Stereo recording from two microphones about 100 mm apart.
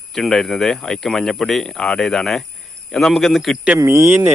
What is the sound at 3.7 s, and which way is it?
Speech, 25° right (ahead or behind).